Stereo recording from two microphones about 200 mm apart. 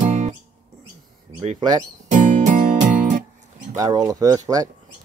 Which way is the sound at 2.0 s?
40° right (ahead or behind).